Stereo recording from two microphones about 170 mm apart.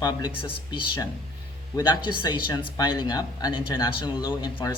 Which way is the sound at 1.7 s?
25° left (ahead or behind).